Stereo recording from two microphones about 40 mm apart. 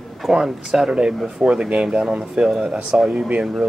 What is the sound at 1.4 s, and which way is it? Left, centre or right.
Speech, right.